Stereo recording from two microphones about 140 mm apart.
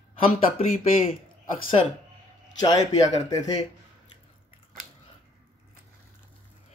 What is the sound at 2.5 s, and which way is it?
Speech, 30° left (ahead or behind).